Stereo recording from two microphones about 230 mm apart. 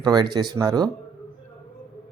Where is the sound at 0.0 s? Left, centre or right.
Centre.